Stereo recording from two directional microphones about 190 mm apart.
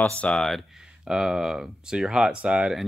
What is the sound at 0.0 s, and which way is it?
Speech, 5° left (ahead or behind).